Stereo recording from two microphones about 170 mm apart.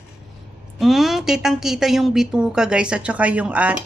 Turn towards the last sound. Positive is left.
turn(degrees=-5)  # may be behind; listen again after turning